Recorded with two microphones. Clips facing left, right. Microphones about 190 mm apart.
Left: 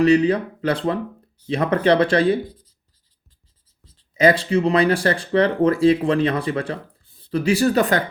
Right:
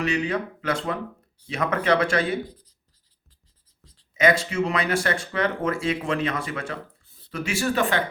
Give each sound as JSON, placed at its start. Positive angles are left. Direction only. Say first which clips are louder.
{"t": 0.0, "sound": "speech", "louder": "left 10 dB", "side_deg": 35}
{"t": 4.1, "sound": "speech", "louder": "left 5 dB", "side_deg": 35}